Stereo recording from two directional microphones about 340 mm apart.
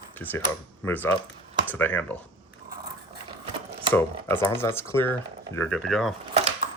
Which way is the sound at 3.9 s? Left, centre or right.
Centre.